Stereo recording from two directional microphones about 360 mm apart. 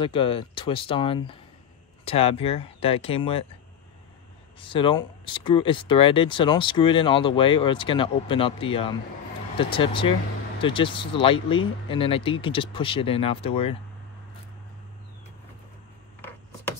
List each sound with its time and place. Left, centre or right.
0.0 s speech: centre
4.6 s speech: centre